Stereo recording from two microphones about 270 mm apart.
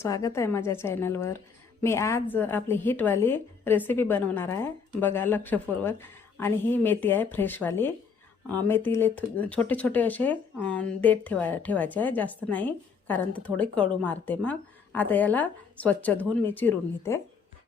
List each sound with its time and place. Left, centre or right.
0.0 s speech: centre